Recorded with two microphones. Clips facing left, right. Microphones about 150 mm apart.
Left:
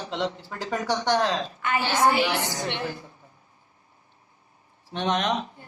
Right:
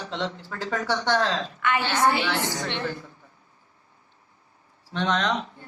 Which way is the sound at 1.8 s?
15° left (ahead or behind).